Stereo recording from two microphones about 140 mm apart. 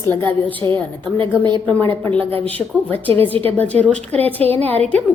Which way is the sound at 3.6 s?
10° left (ahead or behind).